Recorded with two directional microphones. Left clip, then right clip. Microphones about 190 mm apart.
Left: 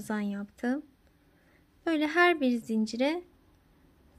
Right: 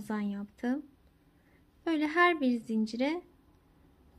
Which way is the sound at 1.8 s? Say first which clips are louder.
Left 2 dB; 20° left (ahead or behind).